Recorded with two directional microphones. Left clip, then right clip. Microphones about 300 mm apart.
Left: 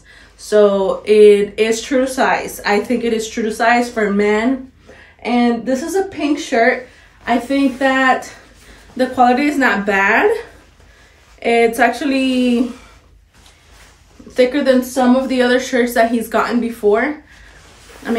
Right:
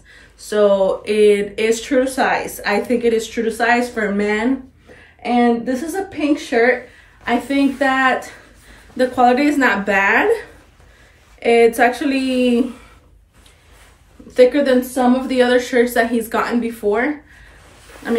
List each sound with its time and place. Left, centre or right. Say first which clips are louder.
0.5 s speech: left 2 dB; centre
14.3 s speech: right 1 dB; centre